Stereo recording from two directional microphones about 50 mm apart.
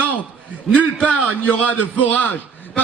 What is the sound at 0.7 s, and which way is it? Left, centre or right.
A man's voice, left.